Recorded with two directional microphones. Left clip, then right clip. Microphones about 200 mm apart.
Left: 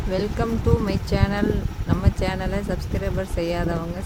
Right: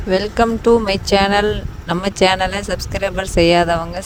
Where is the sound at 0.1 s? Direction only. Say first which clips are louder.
Right 10 dB; 45° right (ahead or behind).